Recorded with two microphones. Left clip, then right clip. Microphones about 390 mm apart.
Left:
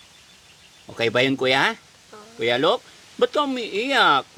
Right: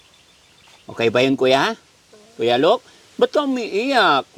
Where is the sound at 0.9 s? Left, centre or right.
Centre.